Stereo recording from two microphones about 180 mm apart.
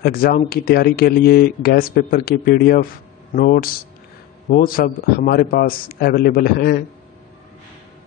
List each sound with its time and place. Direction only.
0.0 s speech: 55° left (ahead or behind)